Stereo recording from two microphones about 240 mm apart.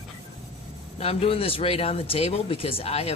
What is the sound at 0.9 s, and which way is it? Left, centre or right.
Speech, left.